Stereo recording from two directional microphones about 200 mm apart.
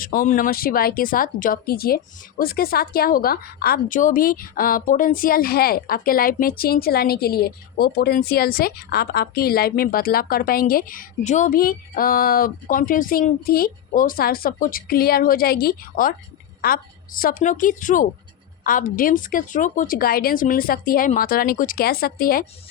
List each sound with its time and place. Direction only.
0.0 s a woman's voice: 45° left (ahead or behind)